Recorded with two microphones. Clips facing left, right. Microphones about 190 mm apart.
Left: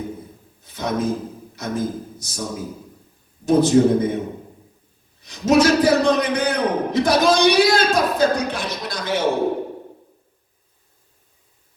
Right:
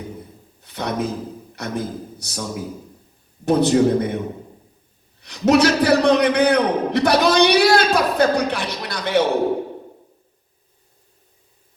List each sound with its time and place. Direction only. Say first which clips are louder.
0.6 s a man's voice: left 1 dB; 65° right (ahead or behind)
3.4 s a man's voice: left 1 dB; 65° right (ahead or behind)
5.2 s a man's voice: even; 65° right (ahead or behind)